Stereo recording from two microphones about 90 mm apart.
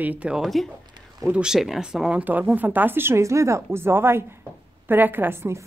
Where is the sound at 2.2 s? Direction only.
20° right (ahead or behind).